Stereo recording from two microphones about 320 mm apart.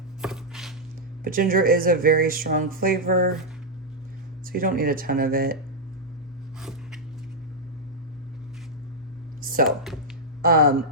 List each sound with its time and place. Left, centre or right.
0.2 s chopping: centre
1.2 s speech: right
4.4 s speech: right
6.6 s a sound: centre
9.4 s a sound: right
9.6 s speech: centre
10.4 s speech: right